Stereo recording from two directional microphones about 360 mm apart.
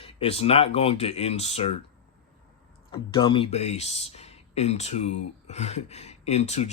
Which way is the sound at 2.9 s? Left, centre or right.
Centre.